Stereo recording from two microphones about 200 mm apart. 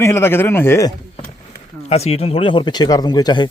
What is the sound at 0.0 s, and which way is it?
Speech, 15° left (ahead or behind).